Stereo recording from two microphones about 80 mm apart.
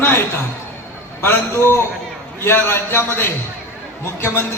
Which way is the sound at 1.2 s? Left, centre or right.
Left.